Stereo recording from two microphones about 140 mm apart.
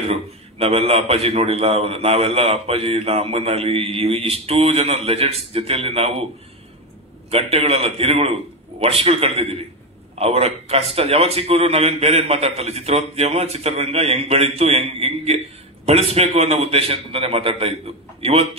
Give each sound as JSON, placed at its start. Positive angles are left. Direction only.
{"t": 0.1, "sound": "a man's voice", "side_deg": -45}
{"t": 7.2, "sound": "a man's voice", "side_deg": -45}